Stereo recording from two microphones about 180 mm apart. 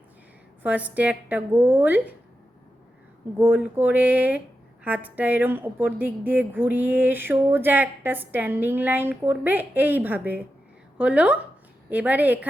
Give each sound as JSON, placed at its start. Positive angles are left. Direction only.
{"t": 0.6, "sound": "a woman's voice", "side_deg": -10}
{"t": 3.3, "sound": "a woman's voice", "side_deg": -10}